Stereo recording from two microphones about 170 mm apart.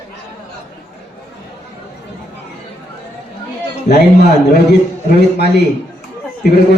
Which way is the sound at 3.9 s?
75° left (ahead or behind).